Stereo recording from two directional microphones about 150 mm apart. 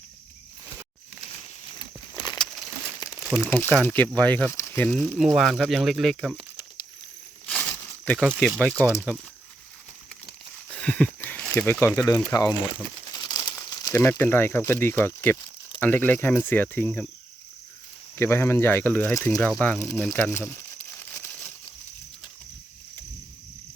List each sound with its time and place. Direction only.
1.8 s a sound: 25° left (ahead or behind)
3.1 s crumpling: 5° right (ahead or behind)
3.5 s speech: 10° left (ahead or behind)
5.4 s speech: centre (ahead or behind)
7.4 s a sound: 5° left (ahead or behind)
8.4 s speech: centre (ahead or behind)
10.7 s speech: 10° left (ahead or behind)
13.1 s crumpling: 25° left (ahead or behind)
13.9 s speech: 15° left (ahead or behind)
18.2 s speech: 15° left (ahead or behind)
19.1 s speech: 20° left (ahead or behind)
20.5 s crumpling: 15° left (ahead or behind)